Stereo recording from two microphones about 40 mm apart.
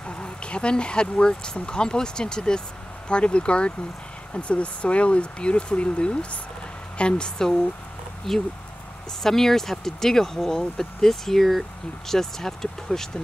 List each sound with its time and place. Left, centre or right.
0.0 s speech: left; by 13.1 s centre